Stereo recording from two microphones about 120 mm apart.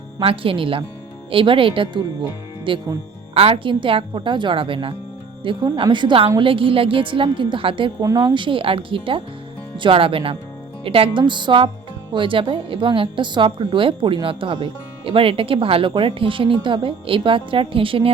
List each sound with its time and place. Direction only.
0.2 s a woman's voice: 50° right (ahead or behind)